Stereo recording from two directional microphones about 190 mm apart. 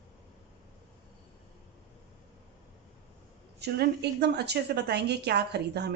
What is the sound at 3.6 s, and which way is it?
A woman's voice, 60° right (ahead or behind).